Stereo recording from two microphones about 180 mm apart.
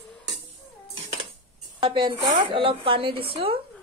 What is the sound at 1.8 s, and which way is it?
A woman's voice, 25° right (ahead or behind).